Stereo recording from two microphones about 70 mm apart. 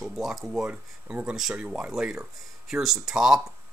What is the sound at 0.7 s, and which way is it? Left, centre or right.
Speech, right.